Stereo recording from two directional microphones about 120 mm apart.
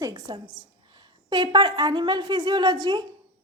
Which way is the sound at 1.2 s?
40° right (ahead or behind).